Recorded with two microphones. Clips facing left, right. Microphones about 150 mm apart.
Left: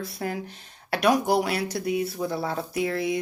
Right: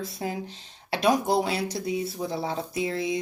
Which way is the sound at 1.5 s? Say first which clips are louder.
Left 2 dB; 60° left (ahead or behind).